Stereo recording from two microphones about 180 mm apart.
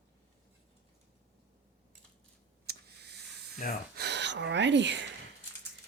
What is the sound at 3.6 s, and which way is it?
Speech, 50° left (ahead or behind).